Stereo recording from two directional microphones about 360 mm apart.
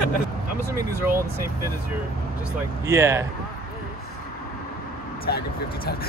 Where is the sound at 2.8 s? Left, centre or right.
Centre.